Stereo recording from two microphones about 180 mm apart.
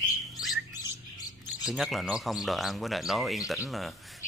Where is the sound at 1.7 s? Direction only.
Centre (ahead or behind).